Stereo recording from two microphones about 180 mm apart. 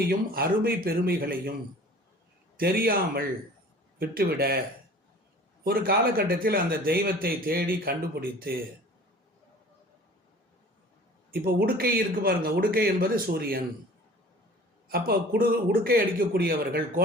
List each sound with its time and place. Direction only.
0.1 s speech: 55° right (ahead or behind)
2.6 s speech: 55° right (ahead or behind)
5.6 s speech: 55° right (ahead or behind)
11.3 s speech: 55° right (ahead or behind)
14.8 s speech: 55° right (ahead or behind)